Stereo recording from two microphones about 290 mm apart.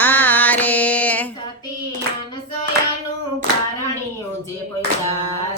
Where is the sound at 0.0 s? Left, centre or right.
Centre.